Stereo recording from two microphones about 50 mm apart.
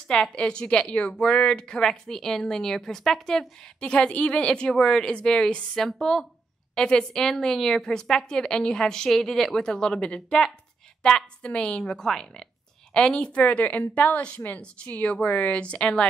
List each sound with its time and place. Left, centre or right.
0.1 s a woman's voice: centre
3.8 s a woman's voice: left
5.8 s a woman's voice: centre
12.9 s a woman's voice: centre